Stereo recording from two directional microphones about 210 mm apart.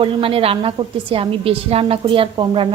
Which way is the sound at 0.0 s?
25° right (ahead or behind).